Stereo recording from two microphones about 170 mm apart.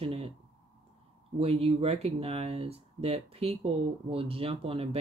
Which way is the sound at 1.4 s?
35° right (ahead or behind).